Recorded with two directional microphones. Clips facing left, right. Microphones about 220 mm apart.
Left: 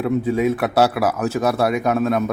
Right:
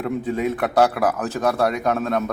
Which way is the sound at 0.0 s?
10° left (ahead or behind).